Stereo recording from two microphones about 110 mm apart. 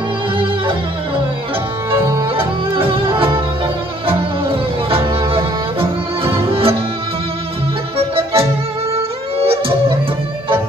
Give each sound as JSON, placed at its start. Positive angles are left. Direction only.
{"t": 0.4, "sound": "music", "side_deg": -50}
{"t": 1.9, "sound": "music", "side_deg": -25}
{"t": 2.3, "sound": "music", "side_deg": -55}
{"t": 8.0, "sound": "music", "side_deg": -60}